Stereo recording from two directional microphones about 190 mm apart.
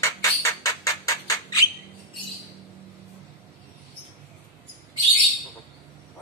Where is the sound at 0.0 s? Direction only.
15° left (ahead or behind).